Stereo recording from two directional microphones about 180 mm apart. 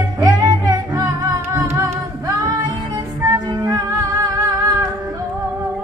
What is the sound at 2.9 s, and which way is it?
Music, 20° right (ahead or behind).